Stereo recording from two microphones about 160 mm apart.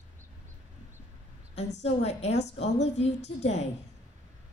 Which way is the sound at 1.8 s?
40° left (ahead or behind).